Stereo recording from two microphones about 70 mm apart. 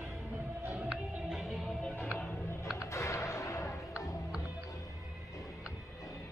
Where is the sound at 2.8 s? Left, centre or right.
Left.